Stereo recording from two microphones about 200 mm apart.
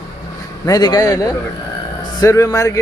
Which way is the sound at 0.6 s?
20° left (ahead or behind).